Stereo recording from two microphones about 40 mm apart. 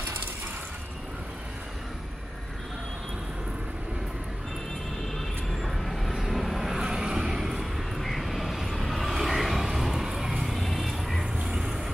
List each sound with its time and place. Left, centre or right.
5.6 s vehicle: centre
6.8 s vehicle: centre
9.1 s a sound: centre
10.6 s vehicle: centre
11.4 s vehicle: centre